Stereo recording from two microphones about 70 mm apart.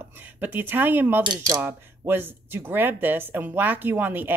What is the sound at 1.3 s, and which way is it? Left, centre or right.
Speech, right.